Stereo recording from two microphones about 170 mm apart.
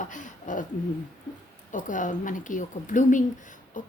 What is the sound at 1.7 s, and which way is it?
Speech, 50° left (ahead or behind).